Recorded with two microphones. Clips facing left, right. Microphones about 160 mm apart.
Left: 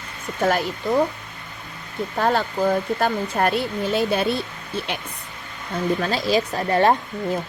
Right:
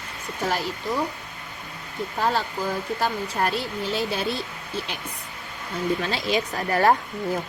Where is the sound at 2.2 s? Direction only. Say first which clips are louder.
Left 4 dB; 60° left (ahead or behind).